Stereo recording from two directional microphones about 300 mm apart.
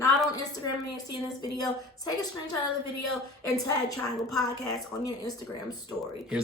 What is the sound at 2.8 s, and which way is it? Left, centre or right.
Speech, left.